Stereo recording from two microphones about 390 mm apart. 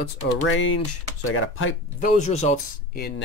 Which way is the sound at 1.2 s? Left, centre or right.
Left.